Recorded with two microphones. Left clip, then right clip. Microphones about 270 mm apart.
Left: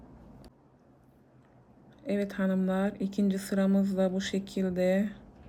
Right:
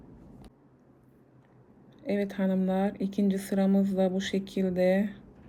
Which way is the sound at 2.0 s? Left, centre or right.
Centre.